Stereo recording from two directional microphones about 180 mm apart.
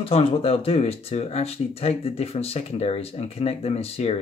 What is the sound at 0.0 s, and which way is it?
Speech, 30° left (ahead or behind).